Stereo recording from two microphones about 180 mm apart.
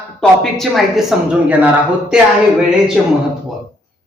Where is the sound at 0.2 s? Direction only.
Centre (ahead or behind).